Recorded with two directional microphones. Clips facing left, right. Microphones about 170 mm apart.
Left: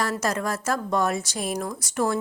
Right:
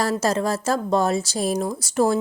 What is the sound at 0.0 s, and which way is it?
A woman's voice, 30° right (ahead or behind).